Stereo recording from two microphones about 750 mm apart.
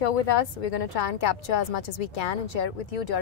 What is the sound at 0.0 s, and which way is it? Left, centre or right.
A woman's voice, left.